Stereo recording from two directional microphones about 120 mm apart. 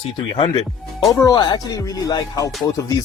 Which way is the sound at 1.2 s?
35° left (ahead or behind).